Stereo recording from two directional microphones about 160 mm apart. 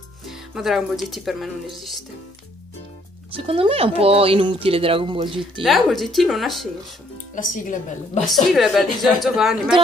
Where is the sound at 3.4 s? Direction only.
35° right (ahead or behind).